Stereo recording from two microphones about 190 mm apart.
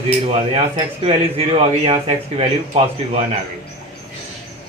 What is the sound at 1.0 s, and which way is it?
Speech, 30° right (ahead or behind).